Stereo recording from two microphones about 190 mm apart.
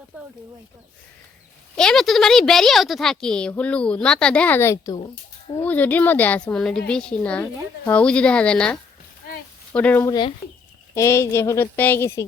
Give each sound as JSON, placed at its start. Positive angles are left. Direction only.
{"t": 1.7, "sound": "a woman's voice", "side_deg": 5}
{"t": 10.1, "sound": "a woman's voice", "side_deg": 25}